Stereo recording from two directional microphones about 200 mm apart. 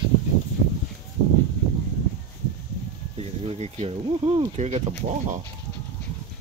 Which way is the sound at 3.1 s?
30° right (ahead or behind).